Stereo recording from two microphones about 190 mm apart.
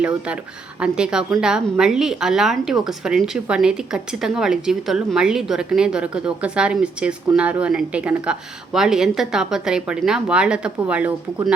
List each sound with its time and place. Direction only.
0.8 s a woman's voice: 5° right (ahead or behind)